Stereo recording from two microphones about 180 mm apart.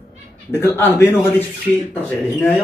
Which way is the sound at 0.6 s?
10° left (ahead or behind).